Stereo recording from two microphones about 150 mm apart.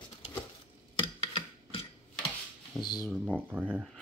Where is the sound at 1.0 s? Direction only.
30° left (ahead or behind).